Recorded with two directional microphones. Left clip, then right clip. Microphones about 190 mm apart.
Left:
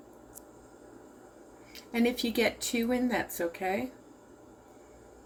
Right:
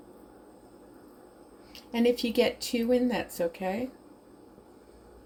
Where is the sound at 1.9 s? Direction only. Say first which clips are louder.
Right 4 dB; 35° right (ahead or behind).